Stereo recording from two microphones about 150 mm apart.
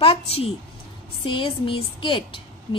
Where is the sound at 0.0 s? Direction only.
40° left (ahead or behind).